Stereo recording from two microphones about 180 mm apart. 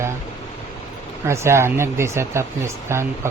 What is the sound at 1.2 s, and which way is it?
Speech, 15° right (ahead or behind).